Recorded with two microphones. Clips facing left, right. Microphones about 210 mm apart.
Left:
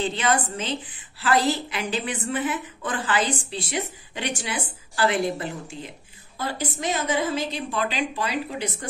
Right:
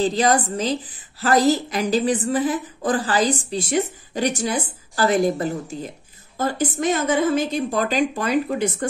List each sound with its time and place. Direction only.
0.0 s a woman's voice: 35° right (ahead or behind)